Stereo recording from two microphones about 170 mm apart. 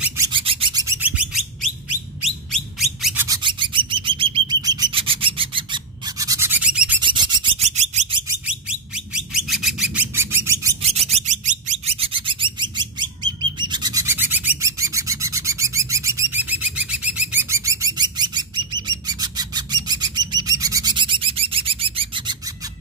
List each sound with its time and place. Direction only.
0.3 s bird: 30° right (ahead or behind)
0.8 s bird: 10° right (ahead or behind)
2.2 s a sound: centre (ahead or behind)
3.4 s bird: 30° right (ahead or behind); by 7.0 s 5° right (ahead or behind)
7.0 s a sound: 25° right (ahead or behind)
7.5 s bird: 40° right (ahead or behind)
8.5 s bird: 5° right (ahead or behind)
10.1 s bird: 15° right (ahead or behind)
10.8 s bird: 40° right (ahead or behind)
13.6 s a sound: 25° right (ahead or behind)